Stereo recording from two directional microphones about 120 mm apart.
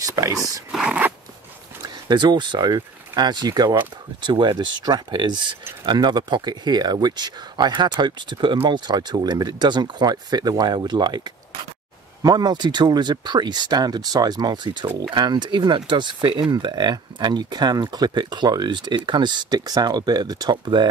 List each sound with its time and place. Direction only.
0.0 s a sound: 30° right (ahead or behind)
0.7 s zipper: 5° right (ahead or behind)
1.8 s speech: 40° right (ahead or behind)